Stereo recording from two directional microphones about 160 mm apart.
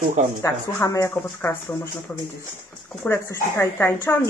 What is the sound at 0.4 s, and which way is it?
Speech, 20° left (ahead or behind).